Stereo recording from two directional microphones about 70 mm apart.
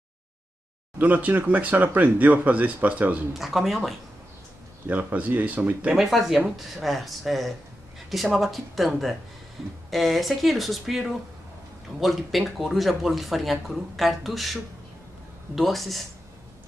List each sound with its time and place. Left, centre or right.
0.9 s speech: right
3.3 s speech: centre
4.8 s speech: right
5.9 s speech: centre